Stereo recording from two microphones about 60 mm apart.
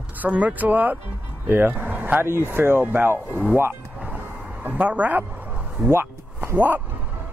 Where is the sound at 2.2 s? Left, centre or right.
Right.